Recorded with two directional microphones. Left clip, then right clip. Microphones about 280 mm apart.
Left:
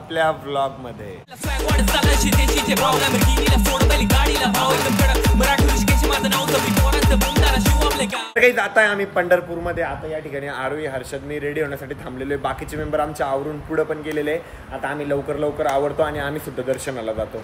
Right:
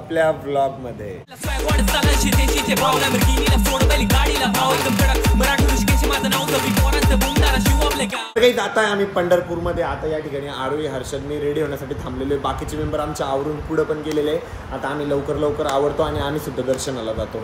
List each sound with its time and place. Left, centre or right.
0.1 s music: centre
1.7 s music: centre
8.5 s speech: centre
12.4 s speech: centre
15.7 s speech: centre